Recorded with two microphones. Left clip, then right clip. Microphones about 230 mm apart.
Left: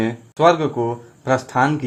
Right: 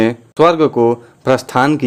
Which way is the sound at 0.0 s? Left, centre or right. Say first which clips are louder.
Right 4 dB; right.